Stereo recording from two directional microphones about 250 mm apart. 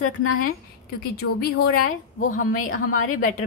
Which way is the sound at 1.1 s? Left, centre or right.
Left.